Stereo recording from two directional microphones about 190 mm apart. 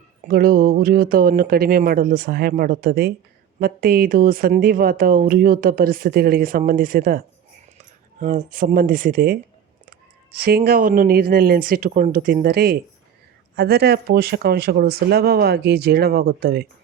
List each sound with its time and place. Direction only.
0.3 s a woman's voice: 50° right (ahead or behind)
8.2 s a woman's voice: 40° right (ahead or behind)